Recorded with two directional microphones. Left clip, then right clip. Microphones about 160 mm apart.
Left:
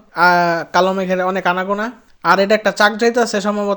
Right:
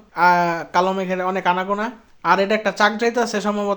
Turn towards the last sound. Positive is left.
turn(degrees=20)  # may be behind; listen again after turning